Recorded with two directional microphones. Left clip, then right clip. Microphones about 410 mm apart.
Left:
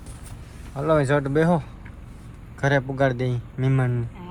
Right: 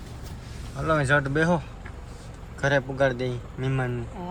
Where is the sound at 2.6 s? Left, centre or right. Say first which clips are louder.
Left 1 dB; centre.